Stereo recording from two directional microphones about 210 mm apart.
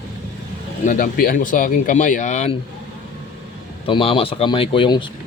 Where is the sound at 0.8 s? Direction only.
40° left (ahead or behind).